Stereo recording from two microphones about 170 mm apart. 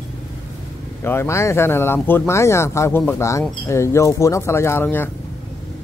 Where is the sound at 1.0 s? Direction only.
15° left (ahead or behind).